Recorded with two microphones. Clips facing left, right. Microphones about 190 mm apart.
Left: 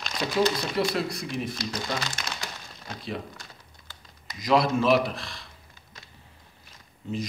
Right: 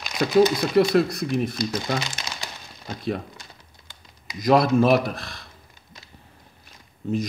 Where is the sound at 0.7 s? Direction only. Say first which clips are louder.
Right 9 dB; 50° right (ahead or behind).